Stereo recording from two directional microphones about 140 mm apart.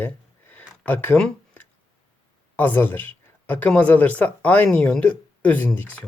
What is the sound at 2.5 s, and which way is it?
Speech, 15° left (ahead or behind).